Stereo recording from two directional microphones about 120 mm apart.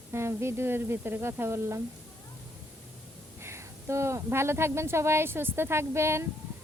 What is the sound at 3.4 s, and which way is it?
A woman's voice, 20° right (ahead or behind).